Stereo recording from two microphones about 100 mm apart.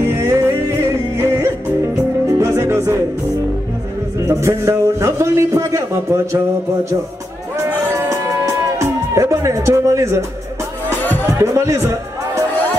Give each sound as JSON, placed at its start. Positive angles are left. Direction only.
{"t": 0.0, "sound": "music", "side_deg": -25}
{"t": 4.3, "sound": "a man's voice", "side_deg": -25}
{"t": 8.0, "sound": "music", "side_deg": -30}
{"t": 11.2, "sound": "speech", "side_deg": -30}